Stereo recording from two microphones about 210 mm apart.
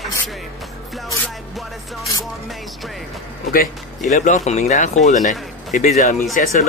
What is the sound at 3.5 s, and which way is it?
Speech, 40° left (ahead or behind).